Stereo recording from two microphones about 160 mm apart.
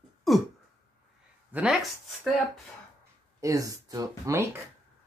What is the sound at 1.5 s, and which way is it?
Speech, 5° right (ahead or behind).